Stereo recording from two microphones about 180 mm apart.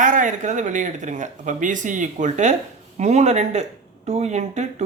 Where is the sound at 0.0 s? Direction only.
45° right (ahead or behind).